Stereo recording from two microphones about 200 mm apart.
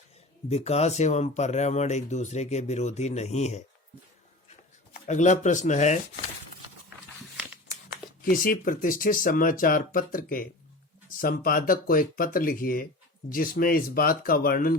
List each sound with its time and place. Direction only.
0.5 s speech: 30° left (ahead or behind)
5.0 s speech: 35° left (ahead or behind)
8.2 s speech: 45° left (ahead or behind)